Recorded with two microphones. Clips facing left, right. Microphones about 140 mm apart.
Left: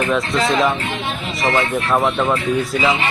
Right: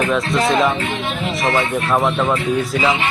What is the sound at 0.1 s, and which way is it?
Speech, centre (ahead or behind).